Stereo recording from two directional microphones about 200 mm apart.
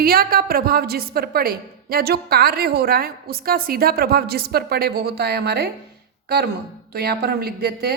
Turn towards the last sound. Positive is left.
turn(degrees=-50)  # may be behind; listen again after turning